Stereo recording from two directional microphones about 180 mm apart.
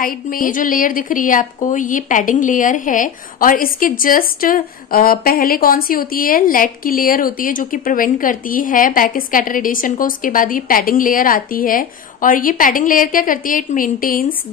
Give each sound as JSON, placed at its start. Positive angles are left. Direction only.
{"t": 0.0, "sound": "a woman's voice", "side_deg": 50}